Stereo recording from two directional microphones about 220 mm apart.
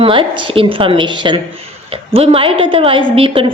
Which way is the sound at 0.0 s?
25° right (ahead or behind).